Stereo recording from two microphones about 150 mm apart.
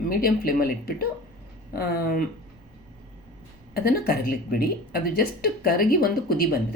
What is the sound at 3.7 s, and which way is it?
Speech, 90° left.